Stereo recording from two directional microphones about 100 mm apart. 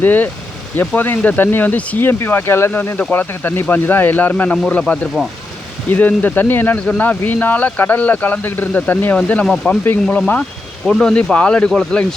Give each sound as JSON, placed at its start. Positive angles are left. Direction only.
{"t": 0.0, "sound": "speech", "side_deg": 15}
{"t": 5.2, "sound": "speech", "side_deg": 0}
{"t": 5.9, "sound": "speech", "side_deg": 15}